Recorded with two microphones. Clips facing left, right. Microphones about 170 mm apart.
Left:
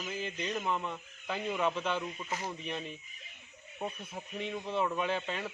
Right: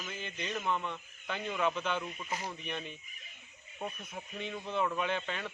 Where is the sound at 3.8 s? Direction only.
20° left (ahead or behind).